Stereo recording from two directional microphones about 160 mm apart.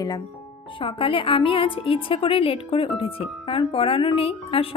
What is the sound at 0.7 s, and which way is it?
A woman's voice, 35° left (ahead or behind).